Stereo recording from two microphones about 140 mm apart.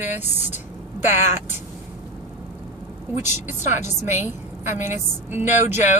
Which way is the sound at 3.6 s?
60° left (ahead or behind).